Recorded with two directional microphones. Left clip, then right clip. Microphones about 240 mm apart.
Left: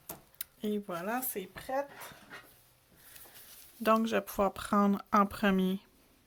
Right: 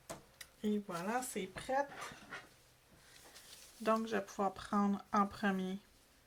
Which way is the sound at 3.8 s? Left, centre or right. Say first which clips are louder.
Left 7 dB; left.